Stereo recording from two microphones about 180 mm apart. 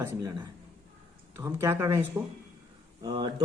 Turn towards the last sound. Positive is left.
turn(degrees=-25)  # may be behind; listen again after turning